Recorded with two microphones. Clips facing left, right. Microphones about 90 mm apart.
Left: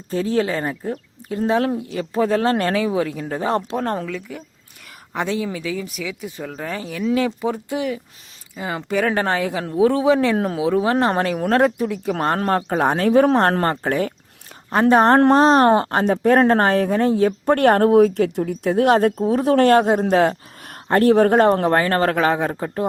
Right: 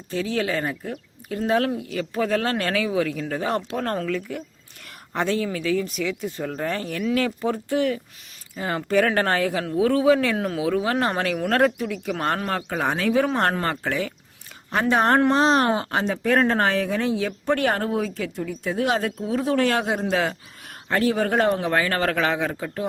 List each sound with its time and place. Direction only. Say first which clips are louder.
0.1 s a man's voice: left 4 dB; 35° left (ahead or behind); by 4.0 s 20° left (ahead or behind)
4.0 s speech: right 2 dB; 5° left (ahead or behind)
5.1 s speech: left 1 dB; 15° left (ahead or behind)
7.0 s a man's voice: left 4 dB; 20° left (ahead or behind); by 19.5 s 45° left (ahead or behind)
19.5 s speech: left 8 dB; 55° left (ahead or behind); by 22.8 s 30° left (ahead or behind)